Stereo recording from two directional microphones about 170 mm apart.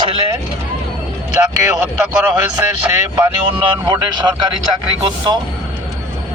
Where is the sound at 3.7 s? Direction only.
25° right (ahead or behind).